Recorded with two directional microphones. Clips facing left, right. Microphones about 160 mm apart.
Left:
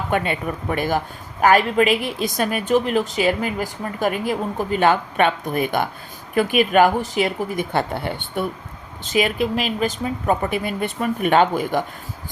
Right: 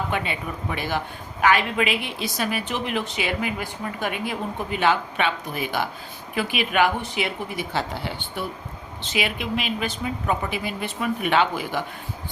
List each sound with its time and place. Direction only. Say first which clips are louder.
0.1 s a woman's voice: left 6 dB; 50° left (ahead or behind)
9.1 s a woman's voice: left 6 dB; 40° left (ahead or behind)